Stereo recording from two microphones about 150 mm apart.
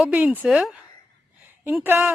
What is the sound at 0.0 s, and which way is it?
A woman's voice, 10° right (ahead or behind).